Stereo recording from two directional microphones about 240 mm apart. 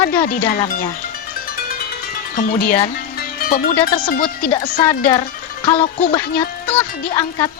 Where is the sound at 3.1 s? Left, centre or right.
Left.